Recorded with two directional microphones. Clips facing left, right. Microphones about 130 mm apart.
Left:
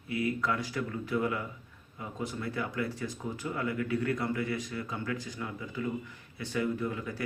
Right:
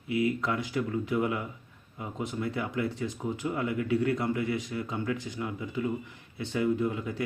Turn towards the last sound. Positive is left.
turn(degrees=-20)  # may be behind; listen again after turning